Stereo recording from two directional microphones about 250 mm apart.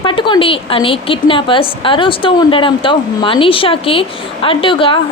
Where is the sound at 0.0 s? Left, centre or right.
Centre.